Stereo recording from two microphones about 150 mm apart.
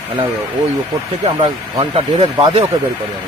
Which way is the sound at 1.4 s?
30° right (ahead or behind).